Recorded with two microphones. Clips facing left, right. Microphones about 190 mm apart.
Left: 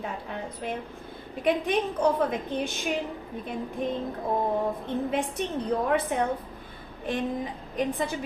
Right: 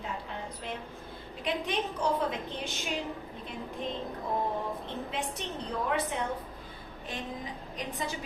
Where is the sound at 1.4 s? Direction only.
55° left (ahead or behind).